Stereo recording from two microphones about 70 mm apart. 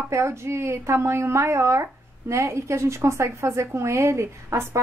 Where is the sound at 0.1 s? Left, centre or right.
Right.